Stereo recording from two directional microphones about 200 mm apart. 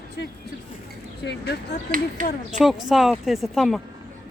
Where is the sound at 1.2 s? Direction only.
55° left (ahead or behind).